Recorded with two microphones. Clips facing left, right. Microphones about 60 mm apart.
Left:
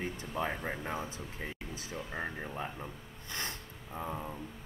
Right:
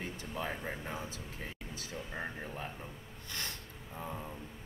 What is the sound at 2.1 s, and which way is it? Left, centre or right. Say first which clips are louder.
Speech: left 3 dB; centre.